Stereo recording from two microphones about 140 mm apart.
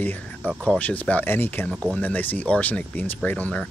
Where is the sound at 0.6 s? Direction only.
10° left (ahead or behind).